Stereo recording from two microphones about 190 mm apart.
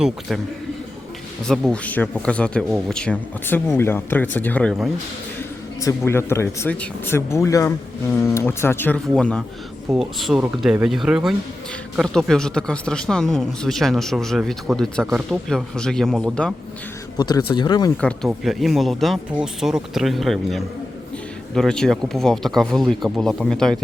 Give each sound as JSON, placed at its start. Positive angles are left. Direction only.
{"t": 1.5, "sound": "speech", "side_deg": 5}
{"t": 5.8, "sound": "speech", "side_deg": 15}
{"t": 17.2, "sound": "speech", "side_deg": 20}
{"t": 17.9, "sound": "speech", "side_deg": 5}